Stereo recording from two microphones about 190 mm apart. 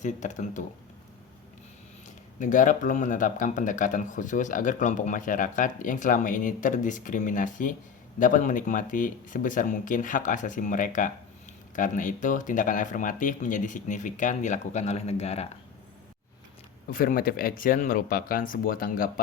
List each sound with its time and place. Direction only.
0.0 s speech: 40° left (ahead or behind)
2.4 s speech: 40° left (ahead or behind)
16.9 s speech: 45° left (ahead or behind)